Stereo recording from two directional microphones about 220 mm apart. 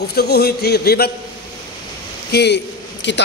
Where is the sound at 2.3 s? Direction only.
50° left (ahead or behind).